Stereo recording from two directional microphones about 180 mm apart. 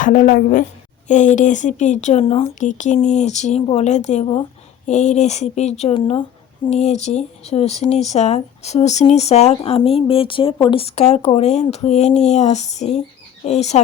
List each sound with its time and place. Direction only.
0.0 s a woman's voice: 45° left (ahead or behind)